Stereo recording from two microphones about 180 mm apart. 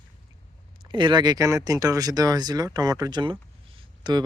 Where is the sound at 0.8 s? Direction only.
25° right (ahead or behind).